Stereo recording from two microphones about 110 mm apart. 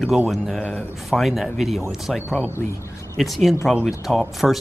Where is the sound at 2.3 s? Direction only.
15° left (ahead or behind).